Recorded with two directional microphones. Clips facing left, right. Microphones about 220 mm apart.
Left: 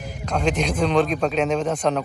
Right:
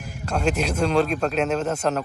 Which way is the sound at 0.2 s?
5° right (ahead or behind).